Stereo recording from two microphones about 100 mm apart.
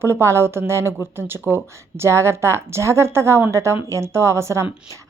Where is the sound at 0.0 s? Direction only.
25° right (ahead or behind).